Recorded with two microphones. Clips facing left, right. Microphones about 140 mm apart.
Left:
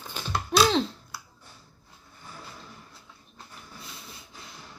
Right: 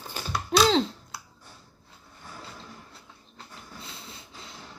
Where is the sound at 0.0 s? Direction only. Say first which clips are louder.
Right 1 dB; 10° right (ahead or behind).